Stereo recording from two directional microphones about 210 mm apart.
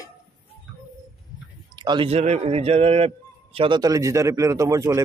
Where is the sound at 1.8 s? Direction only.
20° right (ahead or behind).